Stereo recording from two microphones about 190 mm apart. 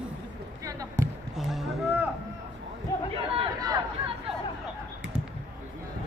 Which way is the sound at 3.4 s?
20° right (ahead or behind).